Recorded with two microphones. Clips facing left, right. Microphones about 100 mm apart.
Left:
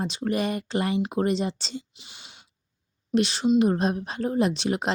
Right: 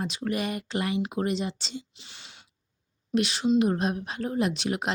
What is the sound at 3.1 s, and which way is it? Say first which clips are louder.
Speech: left 2 dB; 30° left (ahead or behind).